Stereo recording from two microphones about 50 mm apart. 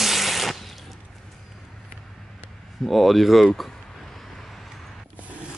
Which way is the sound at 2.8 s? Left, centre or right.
Centre.